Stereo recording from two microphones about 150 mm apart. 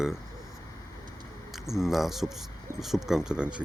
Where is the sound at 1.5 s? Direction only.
Centre (ahead or behind).